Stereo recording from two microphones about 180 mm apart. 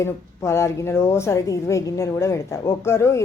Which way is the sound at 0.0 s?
15° left (ahead or behind).